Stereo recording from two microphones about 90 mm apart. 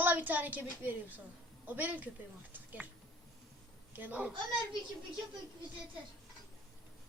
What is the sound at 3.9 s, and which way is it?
Speech, 20° right (ahead or behind).